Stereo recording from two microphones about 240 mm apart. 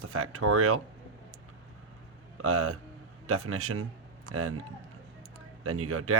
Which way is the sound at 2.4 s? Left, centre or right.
Right.